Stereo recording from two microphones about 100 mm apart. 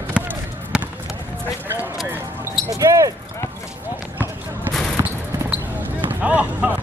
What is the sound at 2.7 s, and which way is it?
Basketball bounce, 35° right (ahead or behind).